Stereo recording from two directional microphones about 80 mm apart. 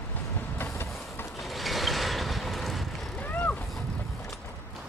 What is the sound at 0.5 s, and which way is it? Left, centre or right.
Vehicle, left.